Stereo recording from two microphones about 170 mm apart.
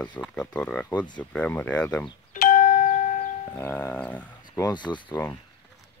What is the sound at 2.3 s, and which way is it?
Doorbell, 55° left (ahead or behind).